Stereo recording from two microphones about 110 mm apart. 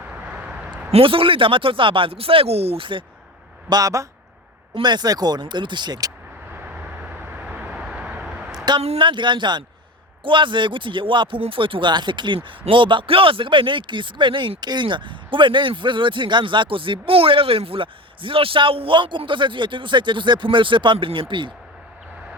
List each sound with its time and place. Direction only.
0.1 s a sound: 10° right (ahead or behind)
0.9 s speech: 60° right (ahead or behind)
3.7 s speech: 35° right (ahead or behind)
6.5 s vehicle: 15° right (ahead or behind)
9.0 s speech: 50° right (ahead or behind)